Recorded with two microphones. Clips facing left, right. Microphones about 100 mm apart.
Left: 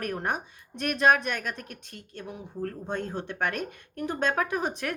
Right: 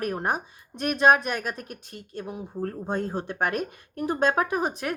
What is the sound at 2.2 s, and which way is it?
Speech, 35° right (ahead or behind).